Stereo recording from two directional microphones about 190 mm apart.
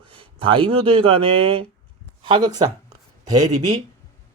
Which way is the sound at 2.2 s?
25° right (ahead or behind).